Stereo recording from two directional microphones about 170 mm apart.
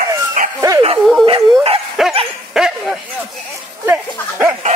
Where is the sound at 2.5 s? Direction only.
5° right (ahead or behind).